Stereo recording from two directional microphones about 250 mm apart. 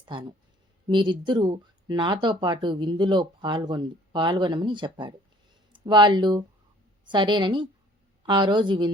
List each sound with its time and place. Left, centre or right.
0.0 s a woman's voice: centre